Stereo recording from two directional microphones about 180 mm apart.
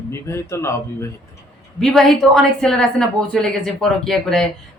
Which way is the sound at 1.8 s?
Centre (ahead or behind).